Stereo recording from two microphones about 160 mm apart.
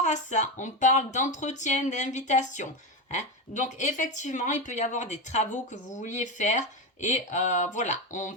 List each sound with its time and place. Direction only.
0.0 s speech: 50° left (ahead or behind)